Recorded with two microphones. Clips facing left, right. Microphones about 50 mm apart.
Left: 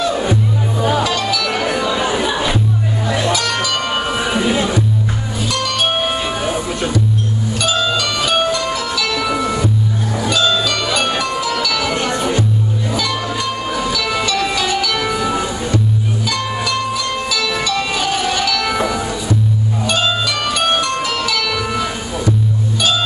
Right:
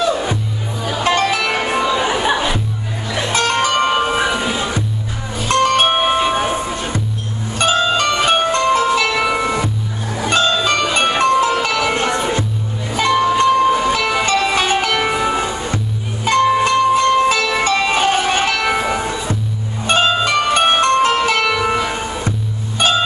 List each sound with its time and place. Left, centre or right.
0.7 s music: left
1.0 s music: right
1.5 s music: right
3.3 s music: right
5.5 s music: right
13.4 s train: right
14.2 s music: right
22.8 s music: right